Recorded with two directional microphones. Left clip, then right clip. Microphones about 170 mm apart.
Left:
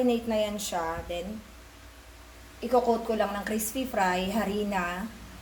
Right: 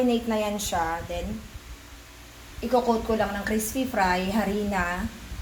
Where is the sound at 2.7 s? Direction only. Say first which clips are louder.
Right 2 dB; centre (ahead or behind).